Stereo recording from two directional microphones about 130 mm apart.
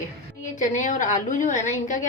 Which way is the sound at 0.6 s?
75° left (ahead or behind).